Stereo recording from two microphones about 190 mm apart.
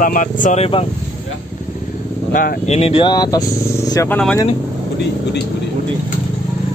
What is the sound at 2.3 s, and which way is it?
Speech, 45° left (ahead or behind).